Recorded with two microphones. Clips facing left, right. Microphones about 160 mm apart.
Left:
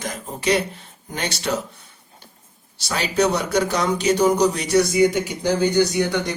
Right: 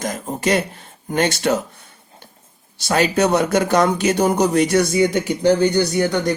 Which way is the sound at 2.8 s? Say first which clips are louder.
Right 4 dB; 50° right (ahead or behind).